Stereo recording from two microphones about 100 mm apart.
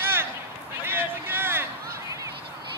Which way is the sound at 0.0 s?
20° right (ahead or behind).